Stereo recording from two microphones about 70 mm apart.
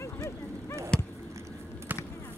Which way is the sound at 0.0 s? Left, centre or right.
Left.